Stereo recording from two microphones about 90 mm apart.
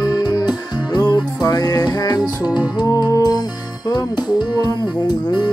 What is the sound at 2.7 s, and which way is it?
Music, 50° left (ahead or behind).